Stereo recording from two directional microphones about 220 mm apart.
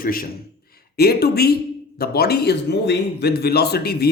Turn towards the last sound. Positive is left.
turn(degrees=45)  # may be behind; listen again after turning